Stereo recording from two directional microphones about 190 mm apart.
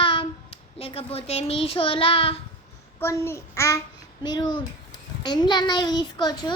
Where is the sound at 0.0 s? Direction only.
25° left (ahead or behind).